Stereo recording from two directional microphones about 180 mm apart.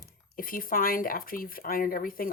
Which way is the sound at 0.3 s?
50° left (ahead or behind).